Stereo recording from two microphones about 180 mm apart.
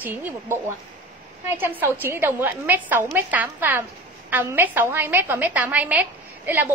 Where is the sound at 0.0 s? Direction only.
10° right (ahead or behind).